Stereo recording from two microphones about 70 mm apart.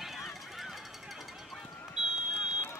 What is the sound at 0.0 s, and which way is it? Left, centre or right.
Run, centre.